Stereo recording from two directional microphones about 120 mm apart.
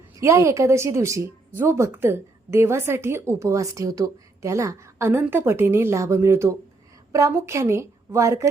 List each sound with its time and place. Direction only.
0.2 s a woman's voice: 25° right (ahead or behind)